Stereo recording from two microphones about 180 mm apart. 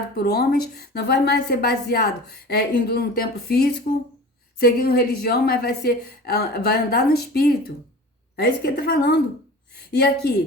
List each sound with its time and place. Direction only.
0.2 s a woman's voice: 60° left (ahead or behind)